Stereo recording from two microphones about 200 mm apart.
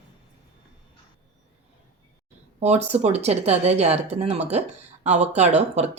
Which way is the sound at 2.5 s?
35° right (ahead or behind).